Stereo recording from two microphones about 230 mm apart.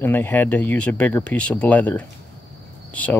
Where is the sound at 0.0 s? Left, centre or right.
Centre.